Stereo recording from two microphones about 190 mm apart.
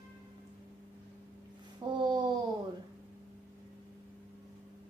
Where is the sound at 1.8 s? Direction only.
25° right (ahead or behind).